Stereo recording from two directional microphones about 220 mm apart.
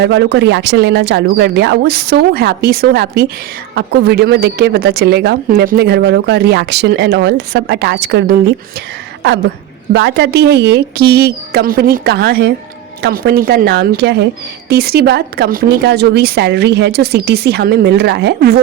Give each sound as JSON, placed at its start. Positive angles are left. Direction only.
{"t": 0.0, "sound": "speech", "side_deg": -50}
{"t": 9.9, "sound": "speech", "side_deg": -50}